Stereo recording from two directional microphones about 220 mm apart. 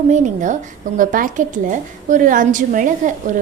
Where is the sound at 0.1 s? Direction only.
35° right (ahead or behind).